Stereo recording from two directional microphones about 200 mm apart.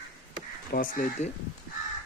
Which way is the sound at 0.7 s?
45° left (ahead or behind).